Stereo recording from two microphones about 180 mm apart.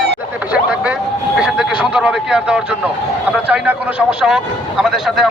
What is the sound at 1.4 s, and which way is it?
Speech, 5° right (ahead or behind).